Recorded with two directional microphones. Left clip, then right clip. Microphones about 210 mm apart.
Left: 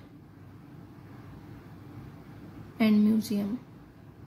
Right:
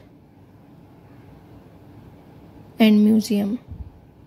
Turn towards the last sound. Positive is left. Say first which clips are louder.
# right 8 dB
turn(degrees=-40)  # may be behind; listen again after turning